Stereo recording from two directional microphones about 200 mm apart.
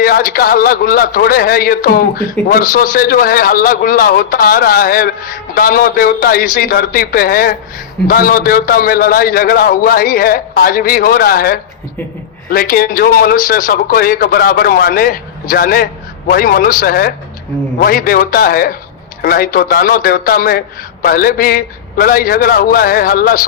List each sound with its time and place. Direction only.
0.0 s a man's voice: 45° left (ahead or behind)